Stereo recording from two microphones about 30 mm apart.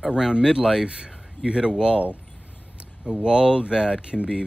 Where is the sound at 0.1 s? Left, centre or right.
Right.